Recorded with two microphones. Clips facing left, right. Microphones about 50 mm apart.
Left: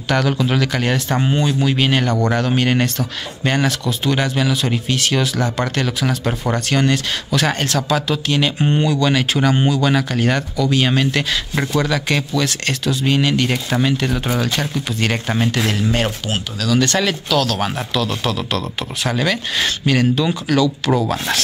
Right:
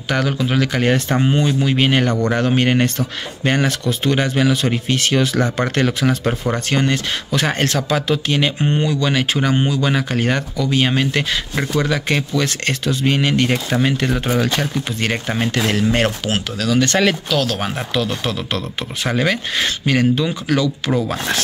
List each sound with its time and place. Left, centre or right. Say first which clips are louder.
0.1 s speech: left 1 dB; centre
1.4 s speech: right 1 dB; right
3.8 s speech: right 1 dB; right; by 12.4 s centre
12.4 s speech: even; right
13.5 s speech: right 1 dB; centre
14.4 s speech: right 1 dB; right
15.7 s speech: right 2 dB; right